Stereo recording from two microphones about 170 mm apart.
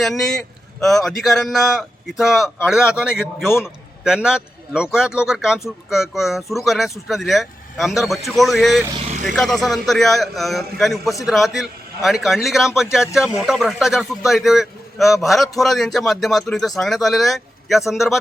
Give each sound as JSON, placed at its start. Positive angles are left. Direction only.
{"t": 0.0, "sound": "a man's voice", "side_deg": 0}
{"t": 8.9, "sound": "vehicle", "side_deg": -35}
{"t": 9.2, "sound": "a man's voice", "side_deg": 0}